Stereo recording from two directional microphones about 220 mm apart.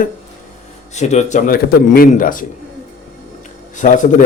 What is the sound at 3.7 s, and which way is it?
Speech, 35° left (ahead or behind).